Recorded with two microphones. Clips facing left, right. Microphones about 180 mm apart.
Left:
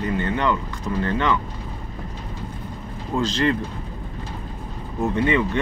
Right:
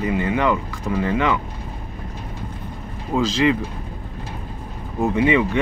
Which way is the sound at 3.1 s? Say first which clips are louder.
Right 3 dB; 35° right (ahead or behind).